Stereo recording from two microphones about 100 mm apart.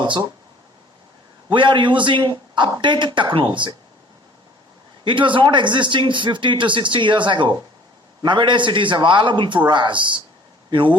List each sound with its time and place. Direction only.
0.0 s speech: 50° right (ahead or behind)
1.5 s speech: 55° right (ahead or behind)
5.0 s speech: 55° right (ahead or behind)